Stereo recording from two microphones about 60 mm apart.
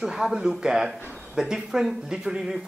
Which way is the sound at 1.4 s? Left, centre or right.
Centre.